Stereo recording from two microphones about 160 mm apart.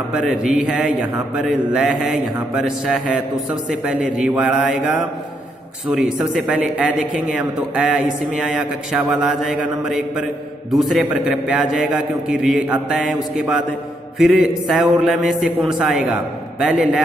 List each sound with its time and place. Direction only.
0.1 s a man's voice: 5° right (ahead or behind)